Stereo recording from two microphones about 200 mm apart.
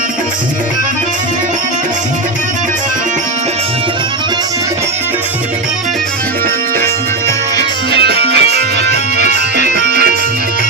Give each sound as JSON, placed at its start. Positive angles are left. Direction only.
{"t": 8.4, "sound": "music", "side_deg": 30}
{"t": 9.7, "sound": "music", "side_deg": -55}